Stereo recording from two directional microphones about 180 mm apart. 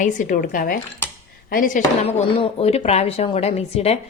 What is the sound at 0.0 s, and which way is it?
A woman's voice, 50° left (ahead or behind).